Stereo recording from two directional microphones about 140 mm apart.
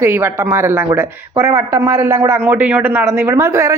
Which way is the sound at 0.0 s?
15° right (ahead or behind).